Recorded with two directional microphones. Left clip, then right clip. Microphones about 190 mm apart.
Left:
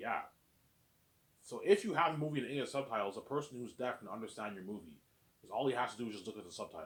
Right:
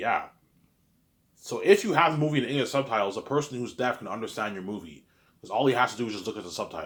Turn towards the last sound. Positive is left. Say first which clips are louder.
# right 12 dB
turn(degrees=-25)  # may be behind; listen again after turning